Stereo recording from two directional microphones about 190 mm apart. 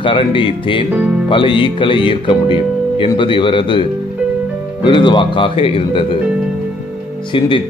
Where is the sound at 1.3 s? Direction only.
25° left (ahead or behind).